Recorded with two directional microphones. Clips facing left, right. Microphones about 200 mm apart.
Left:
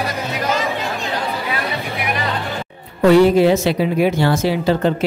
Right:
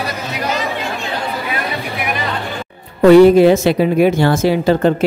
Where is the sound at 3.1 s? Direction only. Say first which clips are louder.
Right 5 dB; 55° right (ahead or behind).